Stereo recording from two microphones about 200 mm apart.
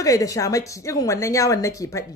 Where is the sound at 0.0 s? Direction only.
15° left (ahead or behind).